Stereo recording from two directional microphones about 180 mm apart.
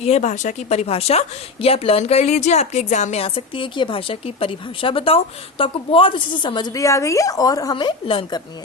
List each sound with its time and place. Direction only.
0.0 s a woman's voice: 40° left (ahead or behind)